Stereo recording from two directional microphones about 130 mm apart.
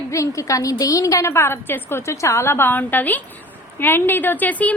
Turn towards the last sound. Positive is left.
turn(degrees=10)  # may be behind; listen again after turning